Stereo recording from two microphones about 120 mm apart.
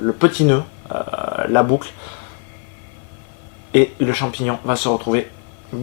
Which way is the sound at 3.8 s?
15° left (ahead or behind).